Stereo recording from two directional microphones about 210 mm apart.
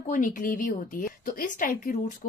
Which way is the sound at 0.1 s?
40° left (ahead or behind).